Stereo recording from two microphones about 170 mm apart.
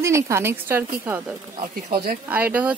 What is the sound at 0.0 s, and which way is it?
A woman's voice, 15° right (ahead or behind).